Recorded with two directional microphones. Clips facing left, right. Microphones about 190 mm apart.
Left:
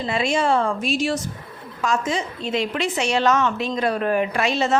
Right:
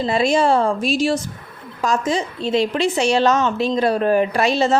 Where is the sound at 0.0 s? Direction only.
35° right (ahead or behind).